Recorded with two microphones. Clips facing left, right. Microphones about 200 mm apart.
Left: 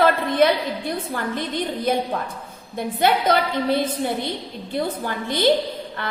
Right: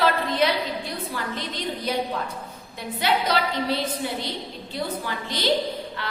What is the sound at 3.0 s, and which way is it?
A woman's voice, 50° left (ahead or behind).